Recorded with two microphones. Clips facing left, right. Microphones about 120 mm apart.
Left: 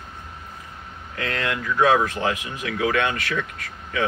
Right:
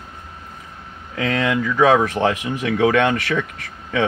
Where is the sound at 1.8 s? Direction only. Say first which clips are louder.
Right 4 dB; 85° right; by 3.4 s 65° right (ahead or behind).